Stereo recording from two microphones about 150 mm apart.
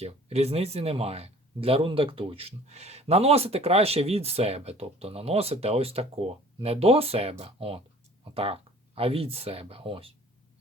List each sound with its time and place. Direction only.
0.0 s speech: 45° right (ahead or behind)